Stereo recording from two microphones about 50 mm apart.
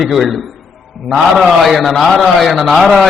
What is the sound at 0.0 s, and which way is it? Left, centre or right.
A man's voice, centre.